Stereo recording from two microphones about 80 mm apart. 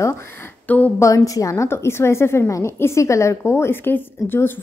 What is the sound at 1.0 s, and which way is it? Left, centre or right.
A woman's voice, left.